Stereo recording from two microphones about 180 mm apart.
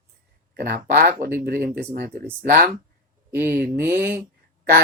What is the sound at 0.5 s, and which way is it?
Speech, 55° right (ahead or behind).